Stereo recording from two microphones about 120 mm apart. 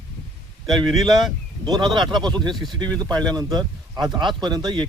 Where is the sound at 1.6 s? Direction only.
35° right (ahead or behind).